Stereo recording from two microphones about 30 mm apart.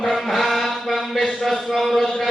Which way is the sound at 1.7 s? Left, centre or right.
Centre.